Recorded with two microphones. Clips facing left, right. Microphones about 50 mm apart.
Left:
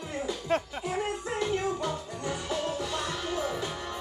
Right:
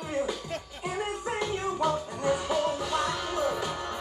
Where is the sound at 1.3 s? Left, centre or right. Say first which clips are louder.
Left 1 dB; right.